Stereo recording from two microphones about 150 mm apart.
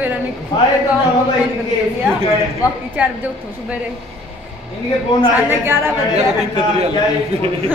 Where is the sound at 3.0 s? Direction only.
10° right (ahead or behind).